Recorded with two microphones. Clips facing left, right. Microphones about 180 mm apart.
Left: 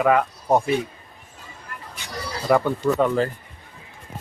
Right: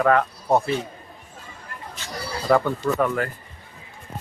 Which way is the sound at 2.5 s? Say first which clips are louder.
Left 1 dB; 10° left (ahead or behind).